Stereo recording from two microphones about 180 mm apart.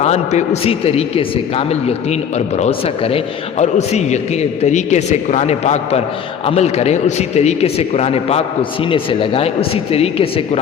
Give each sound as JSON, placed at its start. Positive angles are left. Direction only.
{"t": 0.0, "sound": "a man's voice", "side_deg": 40}